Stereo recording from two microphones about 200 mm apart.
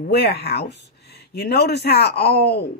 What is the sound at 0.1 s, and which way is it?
Speech, 55° left (ahead or behind).